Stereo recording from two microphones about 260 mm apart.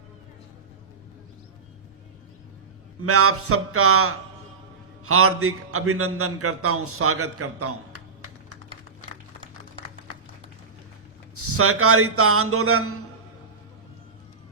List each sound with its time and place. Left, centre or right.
3.0 s a man's voice: right
11.3 s a man's voice: right